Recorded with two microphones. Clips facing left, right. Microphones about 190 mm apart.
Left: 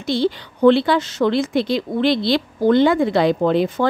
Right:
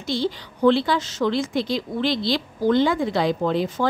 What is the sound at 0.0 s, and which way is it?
Speech, 65° left (ahead or behind).